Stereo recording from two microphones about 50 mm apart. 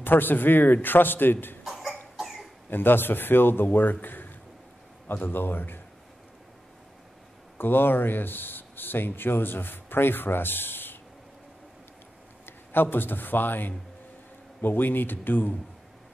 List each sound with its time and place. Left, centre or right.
0.0 s a man's voice: left
1.6 s cough: centre
2.7 s a man's voice: left
7.5 s speech: left
12.4 s a man's voice: left